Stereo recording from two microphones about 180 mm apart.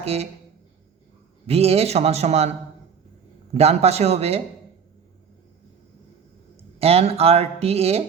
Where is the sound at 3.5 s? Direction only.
35° right (ahead or behind).